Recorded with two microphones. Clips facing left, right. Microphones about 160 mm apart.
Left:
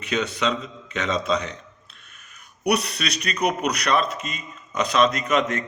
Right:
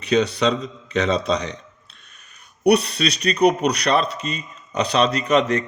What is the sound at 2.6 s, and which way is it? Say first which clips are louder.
A man's voice: right 6 dB; 30° right (ahead or behind).